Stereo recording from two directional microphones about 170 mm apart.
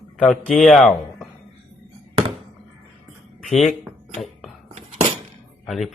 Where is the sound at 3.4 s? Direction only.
Centre (ahead or behind).